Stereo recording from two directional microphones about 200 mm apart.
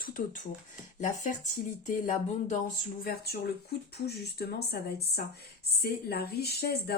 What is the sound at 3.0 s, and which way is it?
Speech, 50° left (ahead or behind).